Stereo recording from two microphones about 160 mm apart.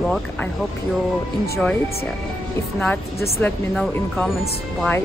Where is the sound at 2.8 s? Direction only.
15° left (ahead or behind).